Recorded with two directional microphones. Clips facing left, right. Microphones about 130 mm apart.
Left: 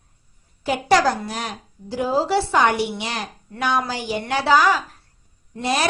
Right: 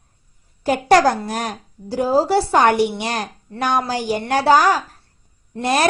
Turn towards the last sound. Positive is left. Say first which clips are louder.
# right 4 dB
turn(degrees=-50)  # may be behind; listen again after turning